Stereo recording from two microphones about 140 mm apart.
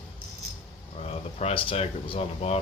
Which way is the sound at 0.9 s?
50° left (ahead or behind).